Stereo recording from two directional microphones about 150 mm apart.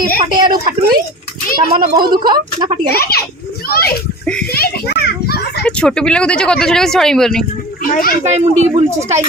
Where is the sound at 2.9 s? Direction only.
90° left.